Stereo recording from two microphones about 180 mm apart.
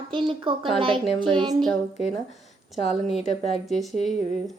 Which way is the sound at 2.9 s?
Centre (ahead or behind).